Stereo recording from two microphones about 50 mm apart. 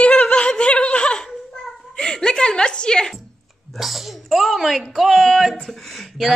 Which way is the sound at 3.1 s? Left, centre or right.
Centre.